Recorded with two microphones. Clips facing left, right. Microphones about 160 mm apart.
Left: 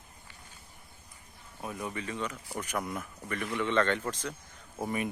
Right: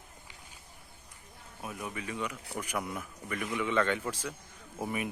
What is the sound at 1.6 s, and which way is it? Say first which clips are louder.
Speech: left 2 dB; 5° right (ahead or behind).